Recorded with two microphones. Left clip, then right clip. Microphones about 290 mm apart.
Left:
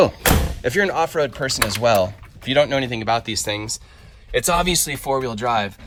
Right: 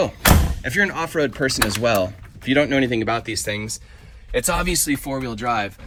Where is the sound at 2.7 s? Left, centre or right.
Centre.